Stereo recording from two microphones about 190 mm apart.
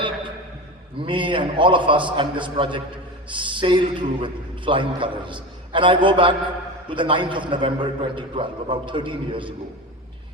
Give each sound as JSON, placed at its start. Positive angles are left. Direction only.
{"t": 0.9, "sound": "a man's voice", "side_deg": -25}